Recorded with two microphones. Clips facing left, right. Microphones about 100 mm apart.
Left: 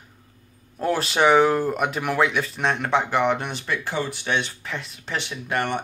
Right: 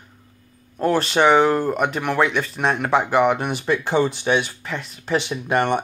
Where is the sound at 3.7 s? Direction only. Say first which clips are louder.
Right 8 dB; 25° right (ahead or behind).